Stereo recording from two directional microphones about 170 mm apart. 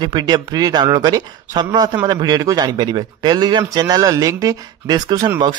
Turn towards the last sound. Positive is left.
turn(degrees=-20)  # may be behind; listen again after turning